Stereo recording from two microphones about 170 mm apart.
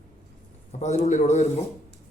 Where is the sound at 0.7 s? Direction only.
40° left (ahead or behind).